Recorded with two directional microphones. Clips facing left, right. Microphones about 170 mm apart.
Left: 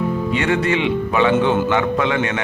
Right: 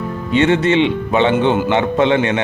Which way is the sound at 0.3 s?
25° right (ahead or behind).